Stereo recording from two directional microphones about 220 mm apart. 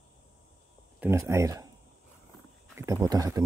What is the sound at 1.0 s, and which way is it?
Speech, 10° right (ahead or behind).